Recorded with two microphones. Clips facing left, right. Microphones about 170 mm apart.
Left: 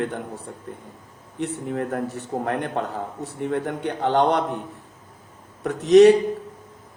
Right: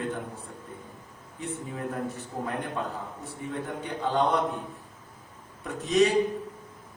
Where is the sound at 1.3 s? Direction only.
70° left (ahead or behind).